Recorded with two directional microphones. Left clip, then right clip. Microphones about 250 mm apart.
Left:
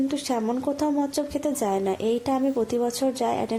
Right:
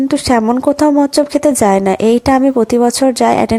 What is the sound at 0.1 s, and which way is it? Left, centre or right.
A woman's voice, right.